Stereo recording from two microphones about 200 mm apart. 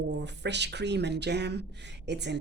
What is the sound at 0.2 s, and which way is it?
A woman's voice, 60° right (ahead or behind).